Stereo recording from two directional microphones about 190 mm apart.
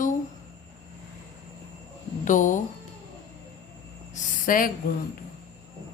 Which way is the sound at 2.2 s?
40° left (ahead or behind).